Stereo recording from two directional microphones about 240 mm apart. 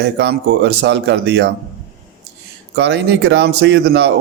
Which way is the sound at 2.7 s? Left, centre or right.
Right.